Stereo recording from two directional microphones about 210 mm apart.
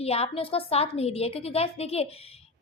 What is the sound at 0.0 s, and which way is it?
A woman's voice, 30° left (ahead or behind).